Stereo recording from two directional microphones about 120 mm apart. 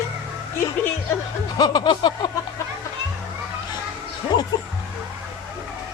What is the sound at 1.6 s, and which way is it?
Speech, 35° left (ahead or behind).